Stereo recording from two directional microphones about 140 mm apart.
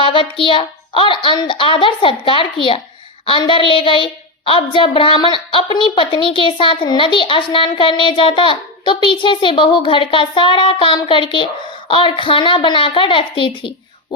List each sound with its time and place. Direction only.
0.0 s child singing: 35° left (ahead or behind)